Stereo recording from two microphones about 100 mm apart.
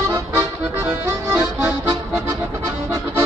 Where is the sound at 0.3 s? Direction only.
25° right (ahead or behind).